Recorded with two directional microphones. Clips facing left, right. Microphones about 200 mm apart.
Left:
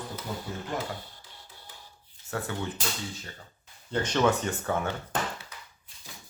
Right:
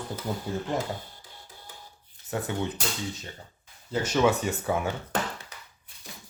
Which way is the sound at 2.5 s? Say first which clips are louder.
Right 5 dB; 20° right (ahead or behind).